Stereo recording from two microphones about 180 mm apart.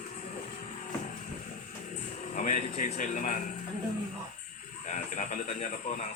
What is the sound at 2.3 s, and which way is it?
A man's voice, 45° left (ahead or behind).